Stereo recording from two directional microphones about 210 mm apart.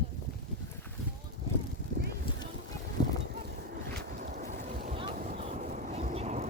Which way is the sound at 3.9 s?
40° right (ahead or behind).